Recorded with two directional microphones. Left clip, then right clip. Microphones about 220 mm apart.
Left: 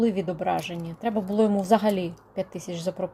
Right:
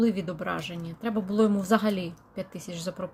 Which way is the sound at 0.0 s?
10° right (ahead or behind).